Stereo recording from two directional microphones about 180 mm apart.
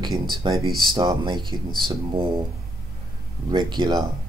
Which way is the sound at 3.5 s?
25° right (ahead or behind).